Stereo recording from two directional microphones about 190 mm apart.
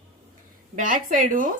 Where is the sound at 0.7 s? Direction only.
45° right (ahead or behind).